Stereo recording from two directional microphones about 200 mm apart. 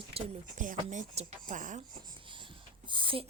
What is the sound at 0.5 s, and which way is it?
Speech, 40° right (ahead or behind).